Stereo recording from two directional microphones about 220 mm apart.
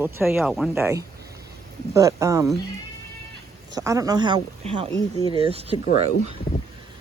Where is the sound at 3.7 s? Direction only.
15° right (ahead or behind).